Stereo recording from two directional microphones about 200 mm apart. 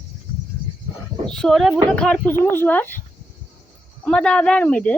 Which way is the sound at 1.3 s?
Centre (ahead or behind).